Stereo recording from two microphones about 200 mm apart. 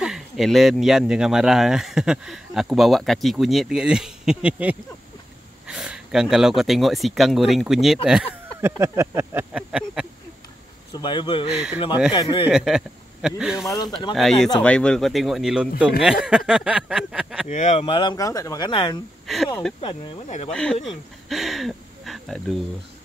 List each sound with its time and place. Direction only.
0.0 s speech: centre (ahead or behind)
8.1 s a sound: 10° right (ahead or behind)
10.9 s speech: 20° left (ahead or behind)
11.5 s speech: 5° right (ahead or behind)
12.1 s speech: 25° left (ahead or behind)
12.4 s speech: 5° right (ahead or behind)
13.7 s speech: 20° left (ahead or behind)
14.6 s speech: 5° left (ahead or behind)
17.5 s speech: 35° left (ahead or behind)
19.2 s speech: centre (ahead or behind)
19.8 s speech: 30° left (ahead or behind)
20.5 s speech: 5° left (ahead or behind)